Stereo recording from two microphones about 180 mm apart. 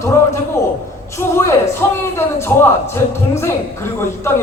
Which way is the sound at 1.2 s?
15° left (ahead or behind).